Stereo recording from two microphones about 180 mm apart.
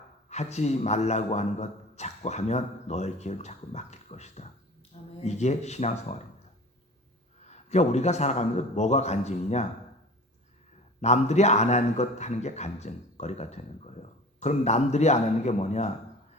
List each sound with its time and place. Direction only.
0.3 s a man's voice: 40° left (ahead or behind)
7.4 s a man's voice: 40° left (ahead or behind)
11.0 s a man's voice: 40° left (ahead or behind)